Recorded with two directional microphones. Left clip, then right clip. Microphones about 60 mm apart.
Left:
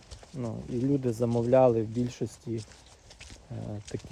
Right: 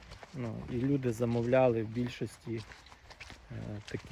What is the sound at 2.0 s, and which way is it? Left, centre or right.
Speech, left.